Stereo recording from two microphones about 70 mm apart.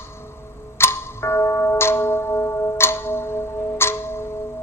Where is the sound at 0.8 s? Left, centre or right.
Left.